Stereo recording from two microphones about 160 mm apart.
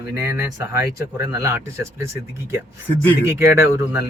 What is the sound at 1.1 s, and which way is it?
Speech, 20° right (ahead or behind).